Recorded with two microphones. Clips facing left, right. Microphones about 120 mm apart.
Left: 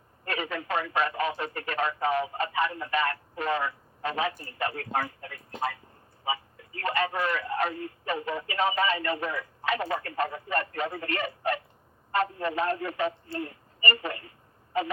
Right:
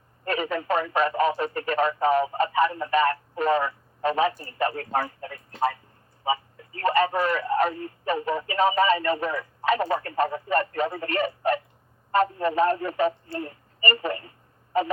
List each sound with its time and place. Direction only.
0.3 s radio: 35° right (ahead or behind)
6.2 s a sound: 35° right (ahead or behind)
8.1 s speech: 35° right (ahead or behind)